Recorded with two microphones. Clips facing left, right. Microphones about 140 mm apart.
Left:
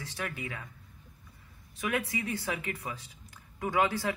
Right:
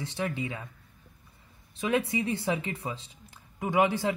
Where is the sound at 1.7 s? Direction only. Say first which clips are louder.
Right 5 dB; 25° right (ahead or behind).